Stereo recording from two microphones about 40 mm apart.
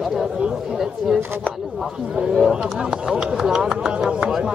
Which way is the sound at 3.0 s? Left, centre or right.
Centre.